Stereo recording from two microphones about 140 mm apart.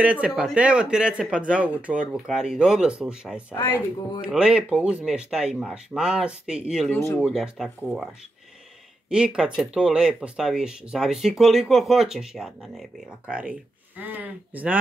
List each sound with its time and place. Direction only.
0.0 s speech: 10° right (ahead or behind)
6.9 s speech: 20° left (ahead or behind)
7.2 s speech: 5° right (ahead or behind)
9.1 s speech: 5° right (ahead or behind)